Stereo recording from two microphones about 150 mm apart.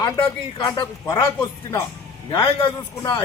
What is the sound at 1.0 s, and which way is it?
Speech, 20° left (ahead or behind).